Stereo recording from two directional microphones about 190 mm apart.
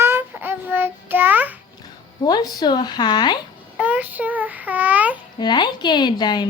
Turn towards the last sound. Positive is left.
turn(degrees=25)  # may be behind; listen again after turning